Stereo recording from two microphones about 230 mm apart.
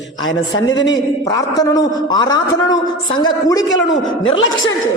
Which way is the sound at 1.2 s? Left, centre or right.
Centre.